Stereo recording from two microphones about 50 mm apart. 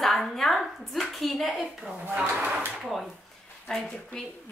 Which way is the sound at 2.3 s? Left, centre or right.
Right.